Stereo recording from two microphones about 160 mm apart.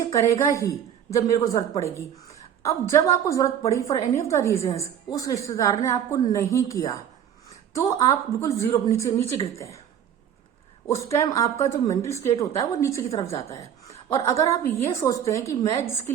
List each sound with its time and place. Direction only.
0.1 s a woman's voice: 20° left (ahead or behind)
2.6 s a woman's voice: 20° left (ahead or behind)
11.0 s a woman's voice: 20° left (ahead or behind)